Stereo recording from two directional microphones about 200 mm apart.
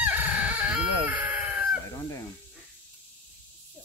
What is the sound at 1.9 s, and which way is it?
Fowl, 15° left (ahead or behind).